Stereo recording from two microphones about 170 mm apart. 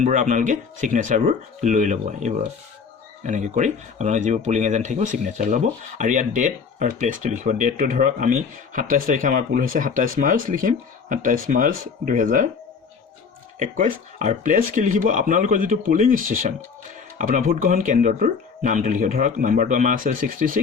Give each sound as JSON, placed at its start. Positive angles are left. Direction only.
{"t": 0.0, "sound": "speech", "side_deg": -45}
{"t": 13.6, "sound": "speech", "side_deg": -45}